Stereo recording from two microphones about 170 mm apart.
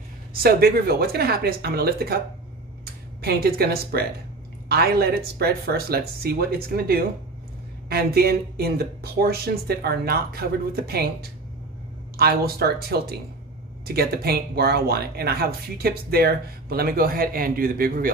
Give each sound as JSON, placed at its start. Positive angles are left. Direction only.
{"t": 0.3, "sound": "speech", "side_deg": -60}
{"t": 12.2, "sound": "speech", "side_deg": -65}